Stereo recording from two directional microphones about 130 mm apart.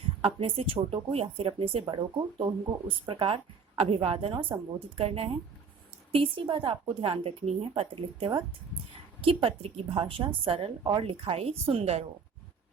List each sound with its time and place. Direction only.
0.2 s speech: 45° right (ahead or behind)